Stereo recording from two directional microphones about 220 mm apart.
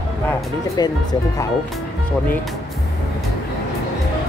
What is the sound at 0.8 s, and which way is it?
Speech, 15° left (ahead or behind).